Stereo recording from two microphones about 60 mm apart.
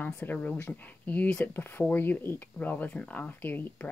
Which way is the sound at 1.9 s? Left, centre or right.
Left.